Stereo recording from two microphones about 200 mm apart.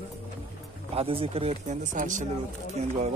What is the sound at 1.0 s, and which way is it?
Speech, 30° right (ahead or behind).